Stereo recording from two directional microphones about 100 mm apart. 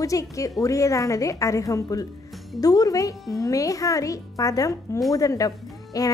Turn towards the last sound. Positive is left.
turn(degrees=35)  # may be behind; listen again after turning